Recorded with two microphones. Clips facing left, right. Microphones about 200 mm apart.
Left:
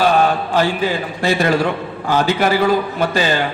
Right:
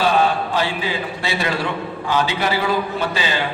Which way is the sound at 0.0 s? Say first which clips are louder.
Left 3 dB; 45° left (ahead or behind).